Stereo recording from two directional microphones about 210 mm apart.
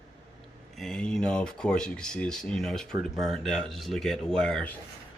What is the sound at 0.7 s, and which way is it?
Speech, centre (ahead or behind).